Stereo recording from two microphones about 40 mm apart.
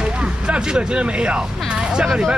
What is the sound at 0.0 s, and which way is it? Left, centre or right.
Speech, right.